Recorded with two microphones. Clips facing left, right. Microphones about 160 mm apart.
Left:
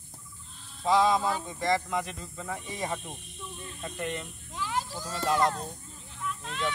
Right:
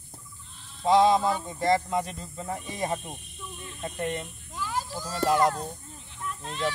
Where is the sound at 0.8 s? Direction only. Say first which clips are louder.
Right 4 dB; 30° right (ahead or behind).